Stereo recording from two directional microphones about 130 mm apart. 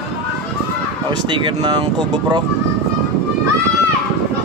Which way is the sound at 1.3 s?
40° right (ahead or behind).